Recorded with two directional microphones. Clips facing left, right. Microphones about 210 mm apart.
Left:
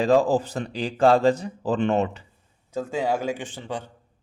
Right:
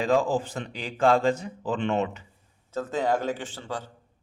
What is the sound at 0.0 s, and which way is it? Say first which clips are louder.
A man's voice: left 4 dB; 35° left (ahead or behind).